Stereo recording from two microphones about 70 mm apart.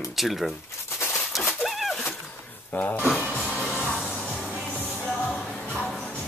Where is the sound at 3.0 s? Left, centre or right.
Centre.